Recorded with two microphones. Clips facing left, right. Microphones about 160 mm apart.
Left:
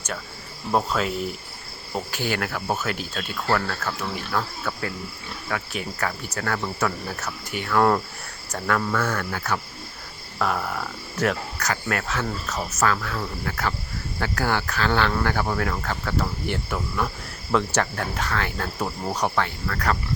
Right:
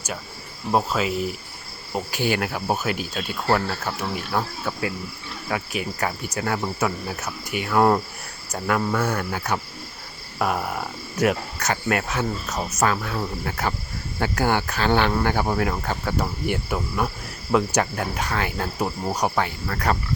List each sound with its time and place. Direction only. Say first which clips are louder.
0.7 s cricket: right 1 dB; 10° right (ahead or behind)
3.5 s speech: right 2 dB; 20° right (ahead or behind)
5.5 s cricket: right 3 dB; 20° right (ahead or behind)
11.7 s speech: right 3 dB; 20° right (ahead or behind)
17.5 s cricket: right 2 dB; 10° right (ahead or behind)
19.6 s speech: right 1 dB; 25° right (ahead or behind)